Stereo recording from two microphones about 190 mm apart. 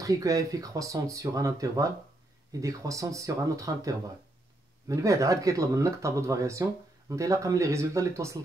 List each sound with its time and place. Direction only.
0.0 s speech: 15° right (ahead or behind)